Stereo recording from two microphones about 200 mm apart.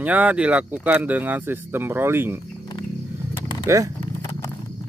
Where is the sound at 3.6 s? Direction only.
15° right (ahead or behind).